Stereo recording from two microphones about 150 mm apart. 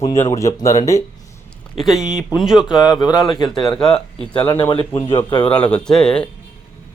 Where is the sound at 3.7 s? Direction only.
5° left (ahead or behind).